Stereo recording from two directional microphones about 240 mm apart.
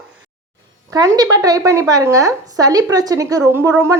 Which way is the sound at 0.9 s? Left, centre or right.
Centre.